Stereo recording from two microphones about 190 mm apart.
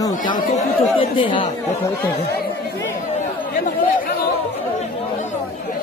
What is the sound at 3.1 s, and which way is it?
Chatter, 40° left (ahead or behind).